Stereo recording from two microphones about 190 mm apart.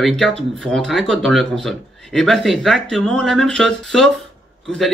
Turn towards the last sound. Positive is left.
turn(degrees=5)  # may be behind; listen again after turning